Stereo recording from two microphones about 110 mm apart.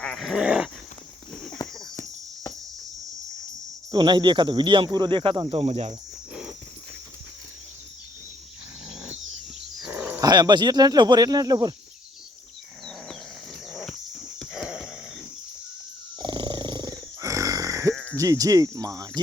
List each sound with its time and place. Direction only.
0.0 s dog: centre (ahead or behind)
1.3 s horse: 5° left (ahead or behind)
3.9 s speech: 45° right (ahead or behind); by 5.9 s 65° right (ahead or behind)
9.8 s wild animals: 10° right (ahead or behind)
10.2 s speech: 35° right (ahead or behind)
14.3 s a sound: 5° right (ahead or behind)
16.1 s a sound: 40° right (ahead or behind)
17.9 s bleat: 10° left (ahead or behind)
18.2 s speech: 30° right (ahead or behind)